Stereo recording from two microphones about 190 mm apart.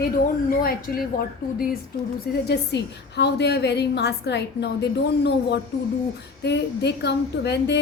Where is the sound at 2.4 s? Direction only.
60° left (ahead or behind).